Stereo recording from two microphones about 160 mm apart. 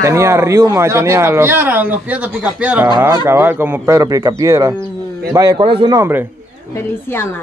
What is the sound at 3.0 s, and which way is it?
Speech, 20° right (ahead or behind).